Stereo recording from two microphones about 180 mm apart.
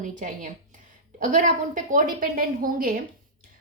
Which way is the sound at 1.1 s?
45° right (ahead or behind).